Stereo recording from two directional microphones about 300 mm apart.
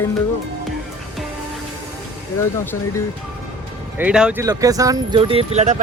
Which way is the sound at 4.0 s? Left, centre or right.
Centre.